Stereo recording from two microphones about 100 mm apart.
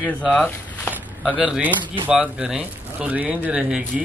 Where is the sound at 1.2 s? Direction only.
5° right (ahead or behind).